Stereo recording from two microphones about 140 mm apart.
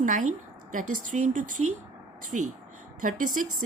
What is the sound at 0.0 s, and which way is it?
A woman's voice, 65° right (ahead or behind).